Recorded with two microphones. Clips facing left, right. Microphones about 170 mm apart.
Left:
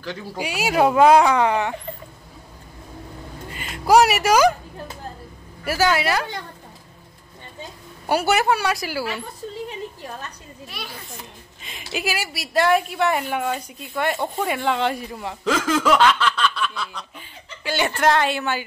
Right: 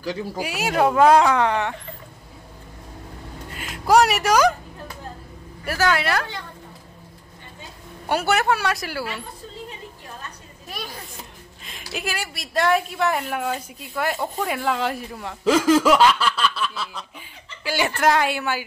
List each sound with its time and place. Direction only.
0.0 s a woman's voice: 5° right (ahead or behind)
3.5 s a woman's voice: centre (ahead or behind)
5.7 s a woman's voice: 5° left (ahead or behind)
8.1 s a woman's voice: 5° left (ahead or behind)
10.7 s children playing: 45° right (ahead or behind)
11.9 s a woman's voice: 5° left (ahead or behind)
15.8 s a sound: 10° right (ahead or behind)
17.6 s a woman's voice: 5° right (ahead or behind)